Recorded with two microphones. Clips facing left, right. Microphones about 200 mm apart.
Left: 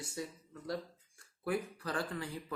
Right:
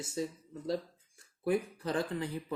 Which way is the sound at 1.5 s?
20° right (ahead or behind).